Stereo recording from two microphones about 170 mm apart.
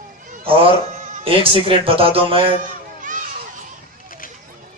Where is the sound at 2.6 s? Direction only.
50° right (ahead or behind).